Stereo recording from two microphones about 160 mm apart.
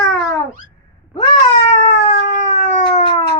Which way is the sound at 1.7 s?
60° left (ahead or behind).